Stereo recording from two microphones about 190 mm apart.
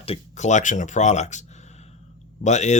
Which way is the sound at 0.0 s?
35° left (ahead or behind).